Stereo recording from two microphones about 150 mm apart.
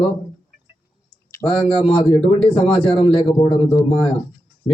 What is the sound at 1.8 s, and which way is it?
Speech, 35° left (ahead or behind).